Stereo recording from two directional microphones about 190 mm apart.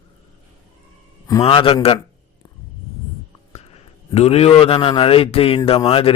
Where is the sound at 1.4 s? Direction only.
30° left (ahead or behind).